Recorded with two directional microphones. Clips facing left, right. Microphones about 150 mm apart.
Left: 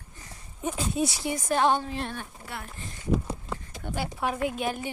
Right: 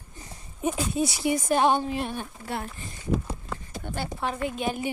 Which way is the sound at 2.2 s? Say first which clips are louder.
Right 6 dB; 30° right (ahead or behind).